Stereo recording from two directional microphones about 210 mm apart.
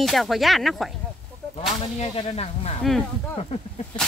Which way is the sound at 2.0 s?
30° left (ahead or behind).